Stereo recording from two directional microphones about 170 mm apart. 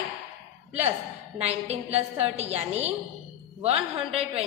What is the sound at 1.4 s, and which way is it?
A woman's voice, 40° right (ahead or behind).